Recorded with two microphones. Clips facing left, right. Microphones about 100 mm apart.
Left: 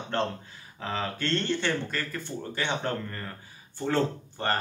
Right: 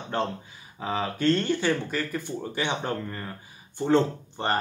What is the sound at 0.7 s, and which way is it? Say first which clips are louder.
Speech: right 3 dB; 15° right (ahead or behind).